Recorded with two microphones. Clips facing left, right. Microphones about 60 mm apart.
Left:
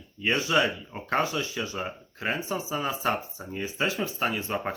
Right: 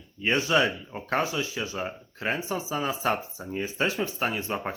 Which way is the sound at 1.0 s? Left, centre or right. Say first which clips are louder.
Even; left.